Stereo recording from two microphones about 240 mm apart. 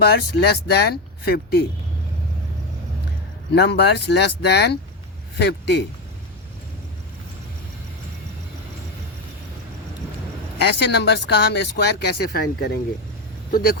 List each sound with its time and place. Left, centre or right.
0.0 s speech: left
3.5 s speech: left
10.6 s speech: left